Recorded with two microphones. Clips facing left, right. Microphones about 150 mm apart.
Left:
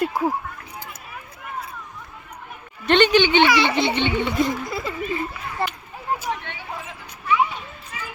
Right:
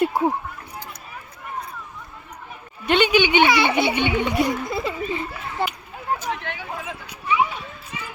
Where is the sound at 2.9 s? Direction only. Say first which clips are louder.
Left 2 dB; 10° right (ahead or behind).